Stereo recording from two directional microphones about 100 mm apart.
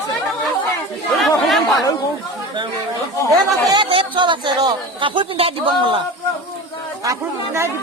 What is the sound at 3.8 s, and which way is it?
Speech, 60° right (ahead or behind).